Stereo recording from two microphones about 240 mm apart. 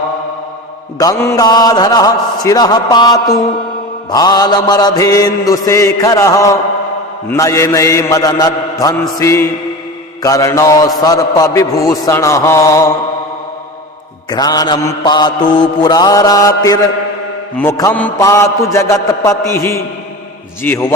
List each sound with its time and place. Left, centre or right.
0.9 s a man's voice: centre
14.3 s a man's voice: centre